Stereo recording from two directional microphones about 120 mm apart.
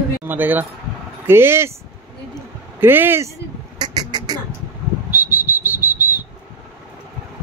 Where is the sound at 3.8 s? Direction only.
35° right (ahead or behind).